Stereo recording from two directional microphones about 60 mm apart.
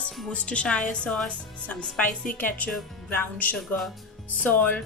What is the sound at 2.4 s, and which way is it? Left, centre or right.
A woman's voice, left.